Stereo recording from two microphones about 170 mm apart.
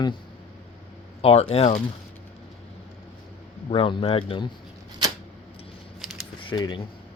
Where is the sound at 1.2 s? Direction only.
35° left (ahead or behind).